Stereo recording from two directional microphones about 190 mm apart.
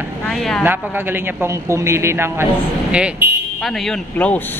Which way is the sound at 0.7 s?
10° right (ahead or behind).